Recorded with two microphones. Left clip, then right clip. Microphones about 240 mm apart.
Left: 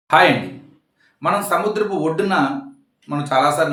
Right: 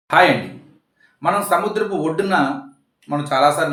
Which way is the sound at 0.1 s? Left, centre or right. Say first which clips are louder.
Even; centre.